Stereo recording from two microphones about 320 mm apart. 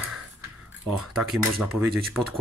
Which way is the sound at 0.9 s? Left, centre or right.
Centre.